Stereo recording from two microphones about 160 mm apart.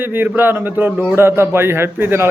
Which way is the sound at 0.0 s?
10° right (ahead or behind).